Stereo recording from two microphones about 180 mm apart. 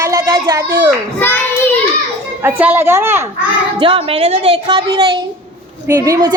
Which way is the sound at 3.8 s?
30° right (ahead or behind).